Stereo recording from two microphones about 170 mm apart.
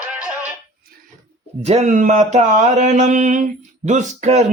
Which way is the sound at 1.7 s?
45° right (ahead or behind).